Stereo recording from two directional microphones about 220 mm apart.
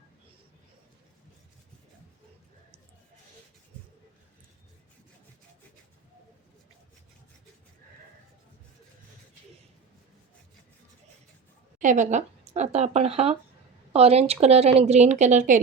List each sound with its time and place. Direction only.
11.8 s speech: 35° right (ahead or behind)